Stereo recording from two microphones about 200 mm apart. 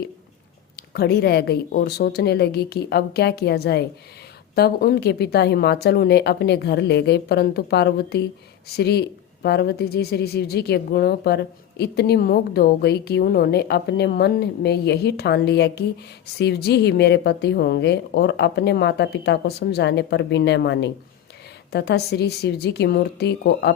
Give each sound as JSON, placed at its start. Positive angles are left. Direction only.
{"t": 0.8, "sound": "a woman's voice", "side_deg": 50}